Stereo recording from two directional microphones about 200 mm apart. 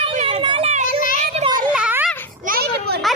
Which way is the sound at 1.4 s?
30° right (ahead or behind).